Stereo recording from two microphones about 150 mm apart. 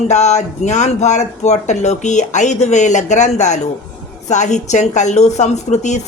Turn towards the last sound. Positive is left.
turn(degrees=50)  # may be behind; listen again after turning